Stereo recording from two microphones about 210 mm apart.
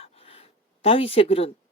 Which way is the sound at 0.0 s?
30° left (ahead or behind).